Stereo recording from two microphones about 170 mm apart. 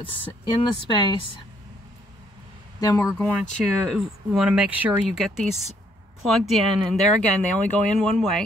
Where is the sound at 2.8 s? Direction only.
20° left (ahead or behind).